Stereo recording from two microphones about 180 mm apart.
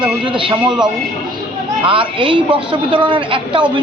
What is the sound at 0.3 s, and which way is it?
Speech, 25° right (ahead or behind).